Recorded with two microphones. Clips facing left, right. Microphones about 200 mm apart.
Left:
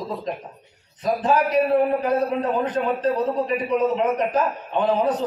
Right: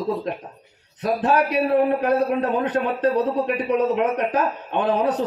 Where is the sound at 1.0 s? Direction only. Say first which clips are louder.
Right 1 dB; 65° right (ahead or behind).